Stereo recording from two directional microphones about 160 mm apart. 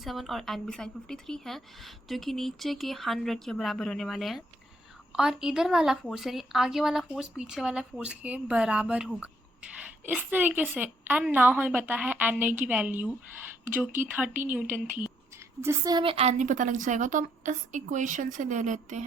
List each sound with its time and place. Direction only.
0.0 s a woman's voice: centre (ahead or behind)
15.6 s a woman's voice: 20° right (ahead or behind); by 19.0 s 50° right (ahead or behind)